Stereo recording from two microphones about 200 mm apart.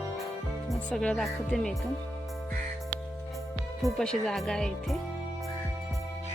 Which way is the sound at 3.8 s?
Centre (ahead or behind).